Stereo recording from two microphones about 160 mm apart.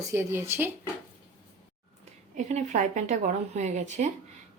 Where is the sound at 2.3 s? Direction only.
45° right (ahead or behind).